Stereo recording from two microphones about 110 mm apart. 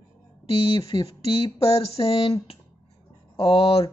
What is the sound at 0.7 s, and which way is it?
Speech, 55° left (ahead or behind).